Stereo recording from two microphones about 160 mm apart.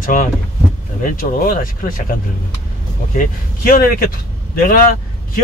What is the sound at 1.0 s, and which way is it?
Speech, 60° left (ahead or behind).